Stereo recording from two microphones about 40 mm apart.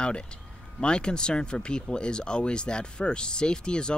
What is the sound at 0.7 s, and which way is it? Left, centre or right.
Speech, left.